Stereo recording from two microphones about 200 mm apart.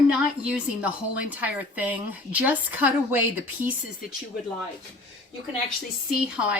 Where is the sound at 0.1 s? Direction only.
5° right (ahead or behind).